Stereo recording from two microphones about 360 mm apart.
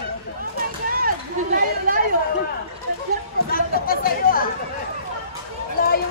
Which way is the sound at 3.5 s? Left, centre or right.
Left.